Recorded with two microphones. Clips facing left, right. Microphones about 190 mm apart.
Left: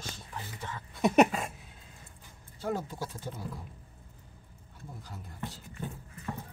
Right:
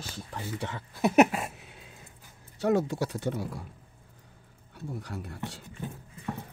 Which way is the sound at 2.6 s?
75° right (ahead or behind).